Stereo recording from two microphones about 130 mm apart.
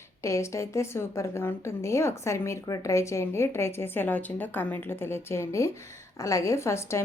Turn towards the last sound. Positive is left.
turn(degrees=20)  # may be behind; listen again after turning